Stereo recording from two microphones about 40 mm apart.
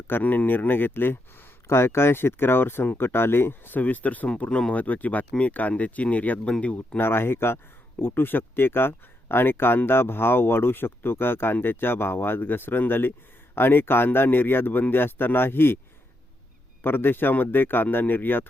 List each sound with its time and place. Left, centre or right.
0.2 s speech: left
3.8 s speech: left
4.4 s speech: left
4.7 s speech: left
7.0 s speech: left
8.0 s speech: left
16.8 s speech: left
17.9 s speech: left